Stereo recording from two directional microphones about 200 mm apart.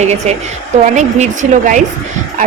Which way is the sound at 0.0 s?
35° right (ahead or behind).